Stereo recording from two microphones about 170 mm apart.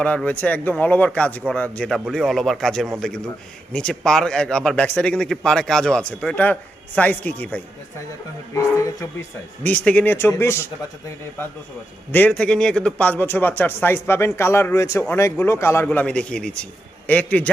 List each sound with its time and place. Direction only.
0.0 s a man's voice: 5° left (ahead or behind)
12.1 s speech: 10° left (ahead or behind)